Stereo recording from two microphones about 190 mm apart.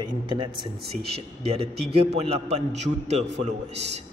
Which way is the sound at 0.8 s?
55° right (ahead or behind).